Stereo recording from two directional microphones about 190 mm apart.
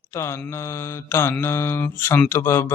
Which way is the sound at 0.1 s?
15° left (ahead or behind).